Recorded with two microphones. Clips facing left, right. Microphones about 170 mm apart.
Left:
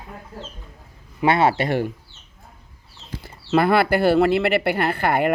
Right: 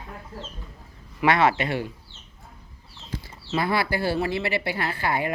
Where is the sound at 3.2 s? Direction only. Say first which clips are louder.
Left 9 dB; 60° left (ahead or behind).